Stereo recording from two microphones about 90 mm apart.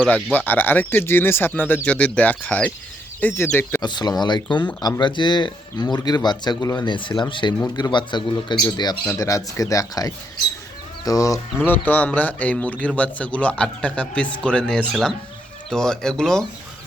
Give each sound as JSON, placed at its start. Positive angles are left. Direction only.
{"t": 0.3, "sound": "speech", "side_deg": 20}
{"t": 3.8, "sound": "speech", "side_deg": 55}
{"t": 9.1, "sound": "speech", "side_deg": 35}
{"t": 11.6, "sound": "speech", "side_deg": 20}